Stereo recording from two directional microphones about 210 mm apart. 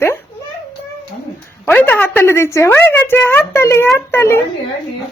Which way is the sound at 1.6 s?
10° left (ahead or behind).